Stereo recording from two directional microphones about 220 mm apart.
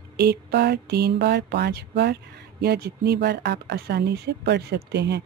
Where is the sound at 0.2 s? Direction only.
50° right (ahead or behind).